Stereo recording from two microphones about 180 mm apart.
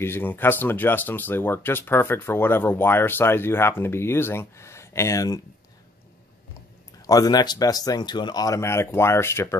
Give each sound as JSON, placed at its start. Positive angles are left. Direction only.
{"t": 0.0, "sound": "speech", "side_deg": 10}
{"t": 7.1, "sound": "speech", "side_deg": 20}